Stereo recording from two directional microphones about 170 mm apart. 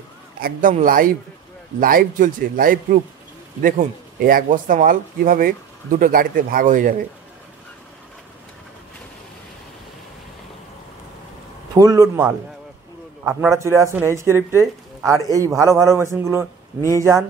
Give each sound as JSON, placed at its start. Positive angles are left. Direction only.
{"t": 0.4, "sound": "speech", "side_deg": -55}
{"t": 11.7, "sound": "a man's voice", "side_deg": -20}
{"t": 13.5, "sound": "a man's voice", "side_deg": -15}